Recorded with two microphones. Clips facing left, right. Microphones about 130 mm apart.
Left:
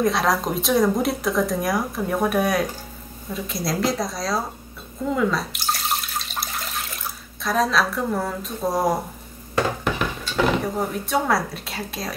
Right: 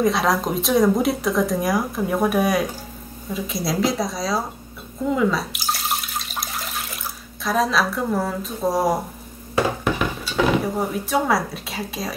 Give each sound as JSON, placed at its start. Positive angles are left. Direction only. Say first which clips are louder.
{"t": 0.0, "sound": "speech", "louder": "right 1 dB", "side_deg": 0}
{"t": 5.0, "sound": "water", "louder": "right 2 dB", "side_deg": 0}
{"t": 7.4, "sound": "speech", "louder": "right 1 dB", "side_deg": 0}